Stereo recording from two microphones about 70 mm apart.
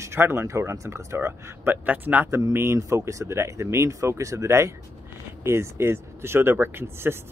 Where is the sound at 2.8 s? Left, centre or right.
Right.